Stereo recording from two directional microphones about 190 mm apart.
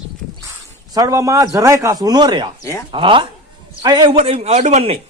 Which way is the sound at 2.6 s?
15° left (ahead or behind).